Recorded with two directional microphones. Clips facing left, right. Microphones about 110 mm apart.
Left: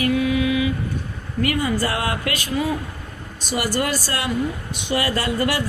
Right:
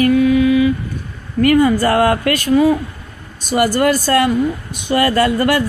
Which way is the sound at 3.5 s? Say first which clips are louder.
Right 9 dB; 50° right (ahead or behind).